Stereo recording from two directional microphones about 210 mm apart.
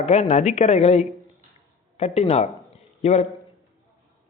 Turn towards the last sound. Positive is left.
turn(degrees=30)  # may be behind; listen again after turning